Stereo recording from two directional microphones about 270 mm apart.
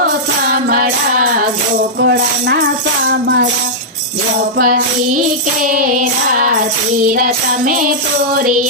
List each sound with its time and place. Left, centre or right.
0.0 s music: right
4.5 s music: right